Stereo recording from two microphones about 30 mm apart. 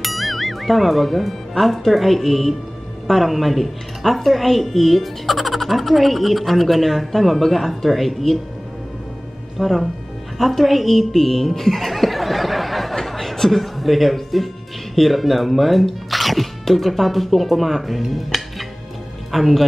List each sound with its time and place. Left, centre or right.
0.0 s a woman's voice: centre
9.6 s a woman's voice: centre
13.0 s music: centre
15.0 s a woman's voice: centre